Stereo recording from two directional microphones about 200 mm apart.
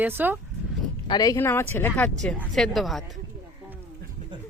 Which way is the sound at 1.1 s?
20° left (ahead or behind).